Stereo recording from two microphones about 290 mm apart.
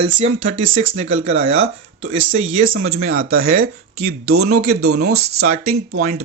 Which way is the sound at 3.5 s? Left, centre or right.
Right.